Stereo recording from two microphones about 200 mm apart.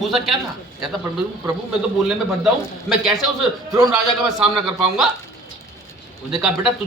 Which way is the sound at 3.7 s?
20° right (ahead or behind).